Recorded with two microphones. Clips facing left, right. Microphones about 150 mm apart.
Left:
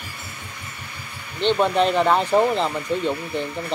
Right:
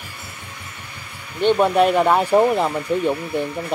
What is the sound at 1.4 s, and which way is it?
Speech, 10° right (ahead or behind).